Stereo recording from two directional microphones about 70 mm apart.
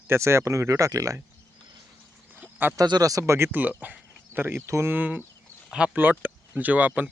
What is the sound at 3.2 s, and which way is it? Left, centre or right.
Speech, right.